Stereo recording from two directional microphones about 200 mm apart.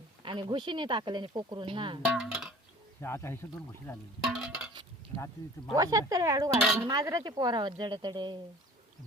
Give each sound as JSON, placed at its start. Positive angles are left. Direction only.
{"t": 0.2, "sound": "speech", "side_deg": -25}
{"t": 2.1, "sound": "speech", "side_deg": -5}
{"t": 3.0, "sound": "speech", "side_deg": 10}
{"t": 4.2, "sound": "a sound", "side_deg": 0}
{"t": 5.7, "sound": "speech", "side_deg": -15}